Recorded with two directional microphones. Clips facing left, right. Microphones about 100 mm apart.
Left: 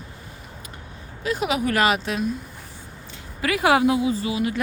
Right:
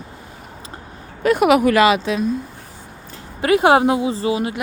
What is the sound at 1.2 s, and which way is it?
Speech, 60° right (ahead or behind).